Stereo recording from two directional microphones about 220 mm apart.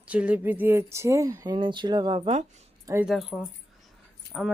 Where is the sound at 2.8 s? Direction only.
10° right (ahead or behind).